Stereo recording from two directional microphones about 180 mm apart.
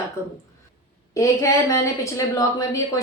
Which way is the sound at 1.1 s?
15° left (ahead or behind).